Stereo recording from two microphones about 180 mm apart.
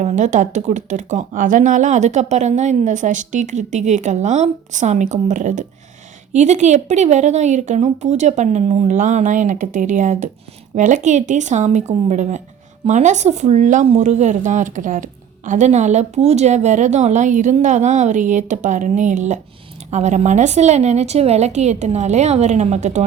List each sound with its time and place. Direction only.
0.0 s a woman's voice: 40° right (ahead or behind)